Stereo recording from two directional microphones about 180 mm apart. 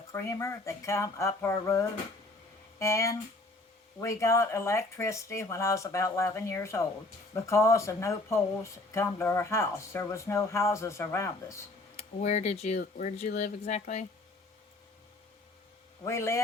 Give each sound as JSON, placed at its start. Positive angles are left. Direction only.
{"t": 0.1, "sound": "speech", "side_deg": 15}
{"t": 11.9, "sound": "speech", "side_deg": 35}
{"t": 16.0, "sound": "speech", "side_deg": 15}